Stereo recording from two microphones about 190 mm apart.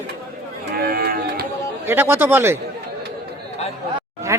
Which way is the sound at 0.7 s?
55° right (ahead or behind).